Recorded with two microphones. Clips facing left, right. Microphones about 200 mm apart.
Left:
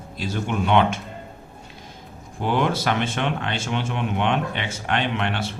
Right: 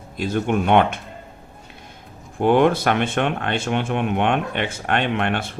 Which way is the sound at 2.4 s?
55° right (ahead or behind).